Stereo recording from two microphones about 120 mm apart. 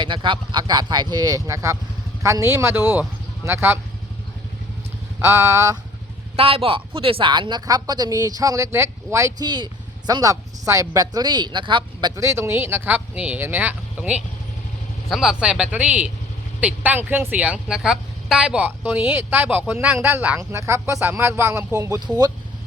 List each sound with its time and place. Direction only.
0.0 s speech: 40° right (ahead or behind); by 3.8 s 20° right (ahead or behind)
5.2 s speech: 25° right (ahead or behind)
6.3 s a woman's voice: 50° right (ahead or behind); by 22.0 s 25° right (ahead or behind)